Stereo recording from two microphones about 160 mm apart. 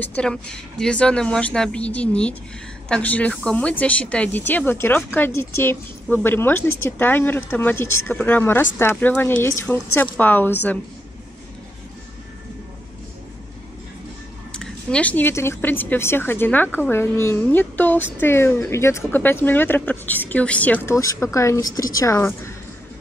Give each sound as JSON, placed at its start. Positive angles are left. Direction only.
{"t": 0.0, "sound": "speech", "side_deg": 5}
{"t": 14.5, "sound": "a woman's voice", "side_deg": 5}